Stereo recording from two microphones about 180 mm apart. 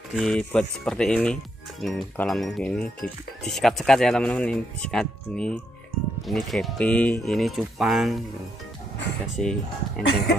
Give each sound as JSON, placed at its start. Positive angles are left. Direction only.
{"t": 0.1, "sound": "speech", "side_deg": 0}
{"t": 9.3, "sound": "speech", "side_deg": 5}